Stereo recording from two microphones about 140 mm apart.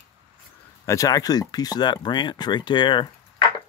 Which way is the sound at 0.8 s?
20° left (ahead or behind).